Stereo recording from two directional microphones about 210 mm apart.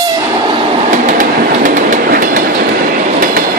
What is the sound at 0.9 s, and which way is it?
Train, 35° right (ahead or behind).